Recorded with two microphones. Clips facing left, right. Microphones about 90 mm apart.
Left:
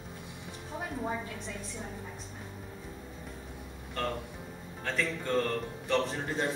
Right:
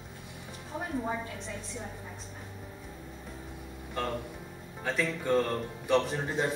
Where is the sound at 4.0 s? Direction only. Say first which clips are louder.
Right 1 dB; 10° right (ahead or behind).